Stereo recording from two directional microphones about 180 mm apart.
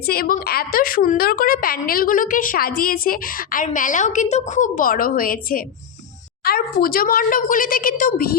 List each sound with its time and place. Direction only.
0.0 s a woman's voice: 55° left (ahead or behind)